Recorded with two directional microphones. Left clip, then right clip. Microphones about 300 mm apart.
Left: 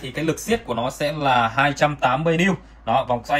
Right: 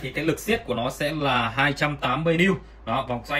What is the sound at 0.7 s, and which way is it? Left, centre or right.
Speech, centre.